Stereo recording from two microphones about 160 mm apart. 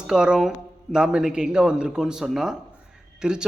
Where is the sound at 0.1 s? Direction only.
5° right (ahead or behind).